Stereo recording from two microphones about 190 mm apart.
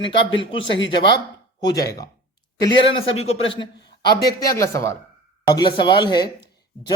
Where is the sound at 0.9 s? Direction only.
25° left (ahead or behind).